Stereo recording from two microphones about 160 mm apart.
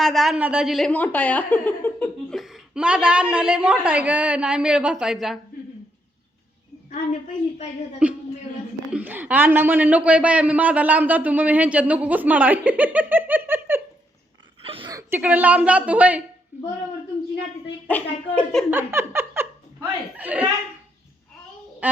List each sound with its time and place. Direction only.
0.0 s a woman's voice: centre (ahead or behind)
2.3 s a man's voice: centre (ahead or behind)
8.0 s a man's voice: 5° right (ahead or behind)
14.6 s whimper: 35° right (ahead or behind)
14.8 s a sound: 20° right (ahead or behind)
15.2 s a man's voice: 10° right (ahead or behind)
17.8 s a woman's voice: 10° left (ahead or behind)
18.7 s speech: 15° right (ahead or behind)